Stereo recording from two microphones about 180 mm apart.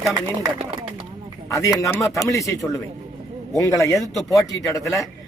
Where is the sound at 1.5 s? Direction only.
15° left (ahead or behind).